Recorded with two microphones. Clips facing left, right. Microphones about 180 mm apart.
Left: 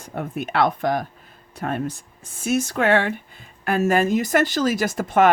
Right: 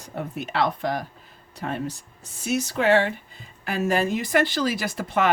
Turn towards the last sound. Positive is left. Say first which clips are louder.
# left 6 dB
turn(degrees=45)  # may be behind; listen again after turning